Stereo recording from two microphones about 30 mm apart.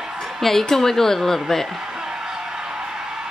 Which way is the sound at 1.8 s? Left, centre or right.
Right.